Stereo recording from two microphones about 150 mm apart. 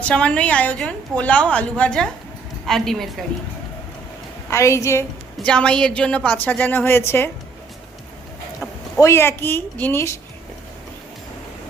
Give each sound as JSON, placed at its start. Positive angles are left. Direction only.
{"t": 0.0, "sound": "a woman's voice", "side_deg": 5}
{"t": 4.4, "sound": "a woman's voice", "side_deg": 20}
{"t": 5.4, "sound": "a woman's voice", "side_deg": 5}
{"t": 9.0, "sound": "a woman's voice", "side_deg": 20}